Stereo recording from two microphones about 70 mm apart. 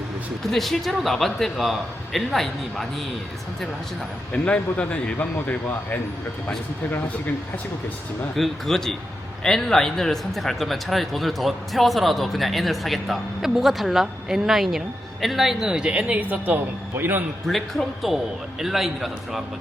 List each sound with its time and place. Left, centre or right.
0.5 s speech: centre
4.3 s speech: centre
8.4 s a man's voice: centre; by 17.2 s right
17.4 s speech: centre